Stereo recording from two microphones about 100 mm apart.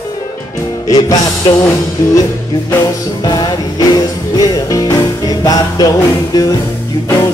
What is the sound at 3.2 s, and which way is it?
Music, 45° left (ahead or behind).